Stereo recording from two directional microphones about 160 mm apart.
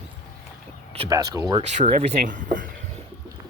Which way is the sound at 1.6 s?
45° right (ahead or behind).